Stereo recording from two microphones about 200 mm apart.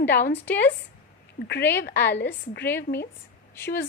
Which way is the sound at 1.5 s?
55° left (ahead or behind).